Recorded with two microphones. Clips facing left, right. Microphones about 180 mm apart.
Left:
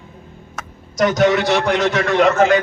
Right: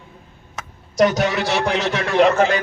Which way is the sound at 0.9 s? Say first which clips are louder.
Left 2 dB; 30° right (ahead or behind).